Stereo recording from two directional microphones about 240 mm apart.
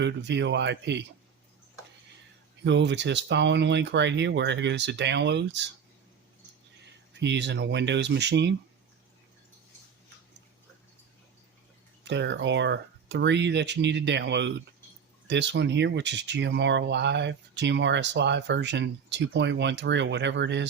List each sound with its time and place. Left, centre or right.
0.0 s speech: right
2.6 s speech: right
6.8 s speech: right
12.0 s speech: right